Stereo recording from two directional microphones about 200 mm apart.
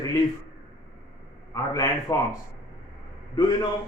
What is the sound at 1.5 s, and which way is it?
Speech, 15° left (ahead or behind).